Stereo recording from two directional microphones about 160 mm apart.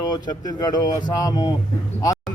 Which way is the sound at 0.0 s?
25° left (ahead or behind).